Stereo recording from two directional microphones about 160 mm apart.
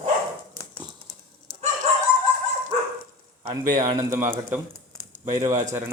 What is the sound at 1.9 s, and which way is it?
Dog, 40° right (ahead or behind).